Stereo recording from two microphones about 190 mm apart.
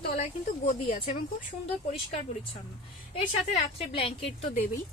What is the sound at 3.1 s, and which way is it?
A woman's voice, 30° left (ahead or behind).